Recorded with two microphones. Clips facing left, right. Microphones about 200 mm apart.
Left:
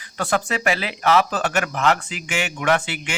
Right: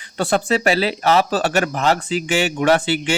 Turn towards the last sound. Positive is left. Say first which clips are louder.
# right 5 dB
turn(degrees=-30)  # may be behind; listen again after turning